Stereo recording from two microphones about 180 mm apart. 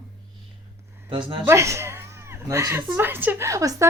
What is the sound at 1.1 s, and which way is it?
Speech, 25° right (ahead or behind).